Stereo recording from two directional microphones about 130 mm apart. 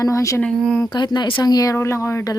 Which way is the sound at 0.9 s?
35° left (ahead or behind).